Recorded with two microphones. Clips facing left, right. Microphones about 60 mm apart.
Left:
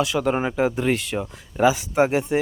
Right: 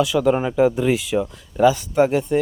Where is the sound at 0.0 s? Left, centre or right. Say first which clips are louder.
Right 4 dB; centre.